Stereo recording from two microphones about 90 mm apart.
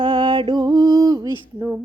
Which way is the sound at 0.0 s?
50° right (ahead or behind).